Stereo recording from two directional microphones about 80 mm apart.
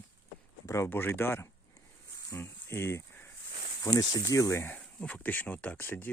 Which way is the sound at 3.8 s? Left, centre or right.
Left.